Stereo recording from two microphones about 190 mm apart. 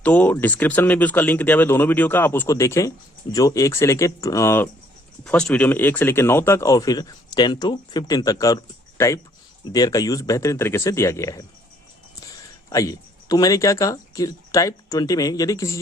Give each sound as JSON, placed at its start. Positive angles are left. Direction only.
{"t": 0.0, "sound": "speech", "side_deg": 10}
{"t": 12.7, "sound": "speech", "side_deg": 15}